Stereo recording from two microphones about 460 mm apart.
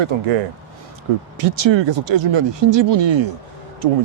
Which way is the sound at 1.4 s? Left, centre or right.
Right.